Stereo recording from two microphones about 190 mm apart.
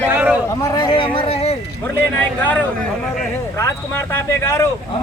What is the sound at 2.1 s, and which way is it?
Speech, 10° left (ahead or behind).